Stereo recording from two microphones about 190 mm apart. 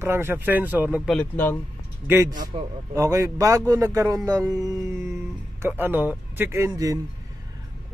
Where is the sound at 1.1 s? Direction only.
10° left (ahead or behind).